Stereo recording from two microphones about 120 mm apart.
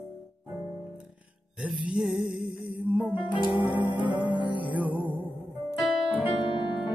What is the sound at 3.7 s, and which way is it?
Music, 40° left (ahead or behind).